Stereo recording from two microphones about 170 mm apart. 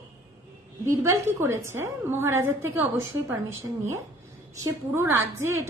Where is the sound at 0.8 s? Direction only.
15° right (ahead or behind).